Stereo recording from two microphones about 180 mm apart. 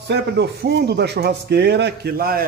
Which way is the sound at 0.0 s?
70° right (ahead or behind).